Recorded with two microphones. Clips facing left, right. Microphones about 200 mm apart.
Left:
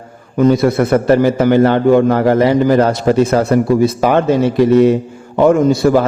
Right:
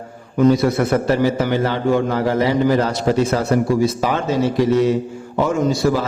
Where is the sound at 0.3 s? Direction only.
55° left (ahead or behind).